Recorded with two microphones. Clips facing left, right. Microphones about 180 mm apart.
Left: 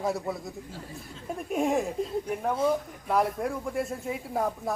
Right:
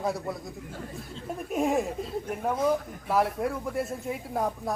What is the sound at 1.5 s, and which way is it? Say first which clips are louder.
Speech: even; centre (ahead or behind).